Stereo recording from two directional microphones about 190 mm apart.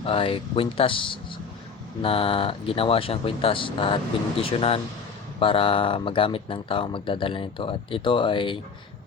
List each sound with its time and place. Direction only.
0.0 s speech: 30° left (ahead or behind)